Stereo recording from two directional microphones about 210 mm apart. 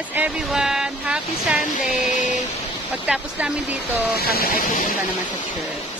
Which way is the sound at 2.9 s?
5° right (ahead or behind).